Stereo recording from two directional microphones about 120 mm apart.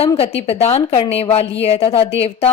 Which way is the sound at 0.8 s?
45° left (ahead or behind).